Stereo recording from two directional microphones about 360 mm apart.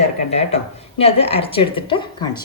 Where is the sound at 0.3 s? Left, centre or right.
Centre.